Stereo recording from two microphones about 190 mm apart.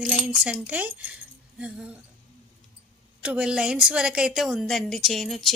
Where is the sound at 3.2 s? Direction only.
5° right (ahead or behind).